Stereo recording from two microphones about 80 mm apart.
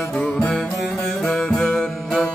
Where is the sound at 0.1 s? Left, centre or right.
Centre.